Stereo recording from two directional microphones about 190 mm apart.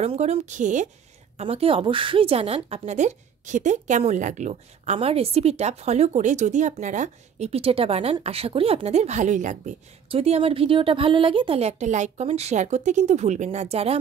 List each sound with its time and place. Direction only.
0.0 s a woman's voice: 30° right (ahead or behind)